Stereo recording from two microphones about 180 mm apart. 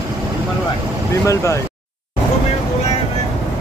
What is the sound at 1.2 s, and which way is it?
Speech, 15° left (ahead or behind).